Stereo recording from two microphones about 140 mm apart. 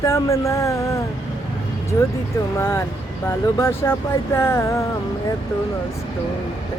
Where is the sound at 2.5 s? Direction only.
15° left (ahead or behind).